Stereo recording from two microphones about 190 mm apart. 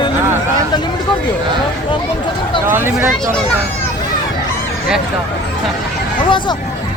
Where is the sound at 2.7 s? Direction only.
10° right (ahead or behind).